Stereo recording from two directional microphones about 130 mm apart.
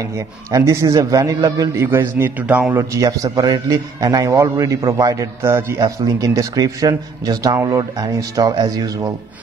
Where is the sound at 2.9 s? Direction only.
25° right (ahead or behind).